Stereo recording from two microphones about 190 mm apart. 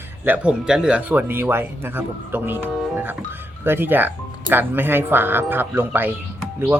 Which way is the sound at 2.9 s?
10° right (ahead or behind).